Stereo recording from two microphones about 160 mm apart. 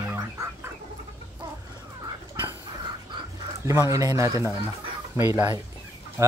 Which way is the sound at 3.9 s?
20° right (ahead or behind).